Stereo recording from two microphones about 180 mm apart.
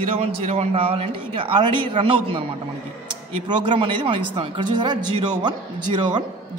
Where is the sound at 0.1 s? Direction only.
35° right (ahead or behind).